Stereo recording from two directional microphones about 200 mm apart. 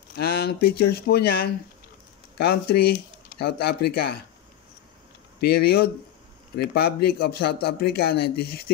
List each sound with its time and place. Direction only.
0.1 s a man's voice: 50° left (ahead or behind)
5.4 s a man's voice: 50° left (ahead or behind)